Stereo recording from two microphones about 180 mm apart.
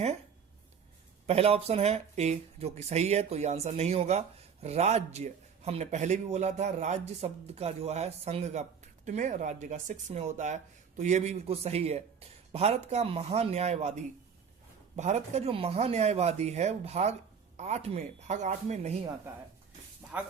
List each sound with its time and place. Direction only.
1.3 s speech: 35° right (ahead or behind)